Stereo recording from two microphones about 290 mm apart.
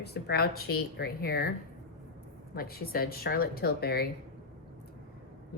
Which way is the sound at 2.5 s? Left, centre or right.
Left.